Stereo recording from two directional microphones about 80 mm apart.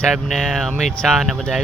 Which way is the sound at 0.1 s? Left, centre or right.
Centre.